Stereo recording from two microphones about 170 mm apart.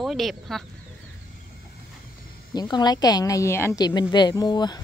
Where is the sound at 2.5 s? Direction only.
25° left (ahead or behind).